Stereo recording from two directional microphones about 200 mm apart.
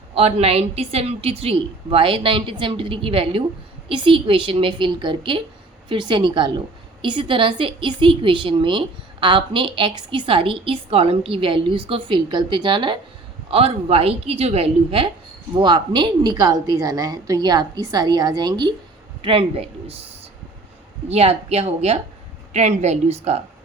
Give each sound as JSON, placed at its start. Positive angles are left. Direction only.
{"t": 0.1, "sound": "a woman's voice", "side_deg": -30}
{"t": 21.1, "sound": "a woman's voice", "side_deg": -30}